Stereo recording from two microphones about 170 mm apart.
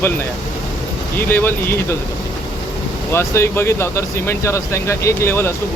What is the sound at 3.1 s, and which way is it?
Speech, 15° left (ahead or behind).